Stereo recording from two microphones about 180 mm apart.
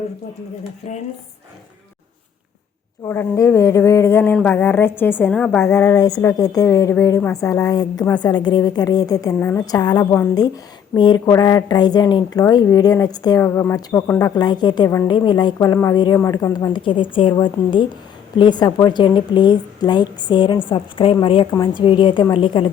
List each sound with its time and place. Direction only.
3.1 s a woman's voice: 15° left (ahead or behind)
5.7 s a woman's voice: 15° left (ahead or behind)